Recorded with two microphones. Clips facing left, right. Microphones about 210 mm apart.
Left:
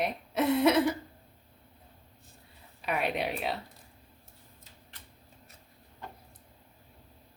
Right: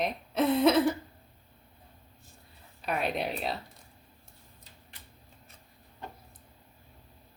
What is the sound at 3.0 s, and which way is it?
Speech, 70° left (ahead or behind).